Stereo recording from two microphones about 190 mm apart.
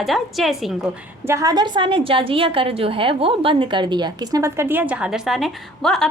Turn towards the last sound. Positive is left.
turn(degrees=0)  # may be behind; listen again after turning